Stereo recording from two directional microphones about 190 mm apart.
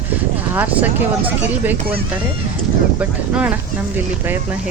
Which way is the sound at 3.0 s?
10° right (ahead or behind).